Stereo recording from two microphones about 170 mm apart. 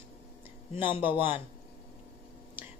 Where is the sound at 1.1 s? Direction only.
30° left (ahead or behind).